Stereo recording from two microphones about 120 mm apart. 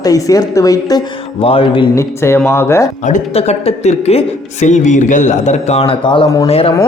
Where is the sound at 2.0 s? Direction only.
20° left (ahead or behind).